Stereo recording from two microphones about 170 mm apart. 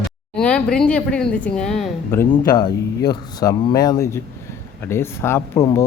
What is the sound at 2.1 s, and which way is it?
A man's voice, 15° left (ahead or behind).